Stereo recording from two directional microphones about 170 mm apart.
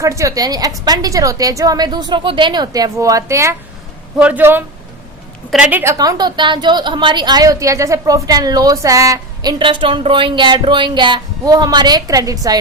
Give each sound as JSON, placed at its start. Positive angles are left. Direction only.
{"t": 0.0, "sound": "a woman's voice", "side_deg": -20}
{"t": 5.8, "sound": "a woman's voice", "side_deg": -20}